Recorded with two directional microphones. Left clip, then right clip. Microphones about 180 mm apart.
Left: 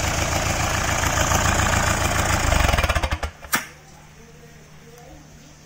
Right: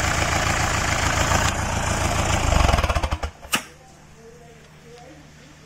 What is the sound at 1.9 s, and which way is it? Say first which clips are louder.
Vehicle: left 1 dB; 15° right (ahead or behind).